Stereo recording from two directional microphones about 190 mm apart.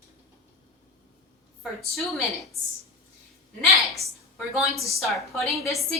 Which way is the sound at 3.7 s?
Centre (ahead or behind).